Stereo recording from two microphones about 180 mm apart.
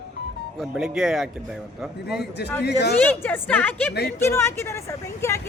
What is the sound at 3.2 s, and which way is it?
Speech, 10° left (ahead or behind).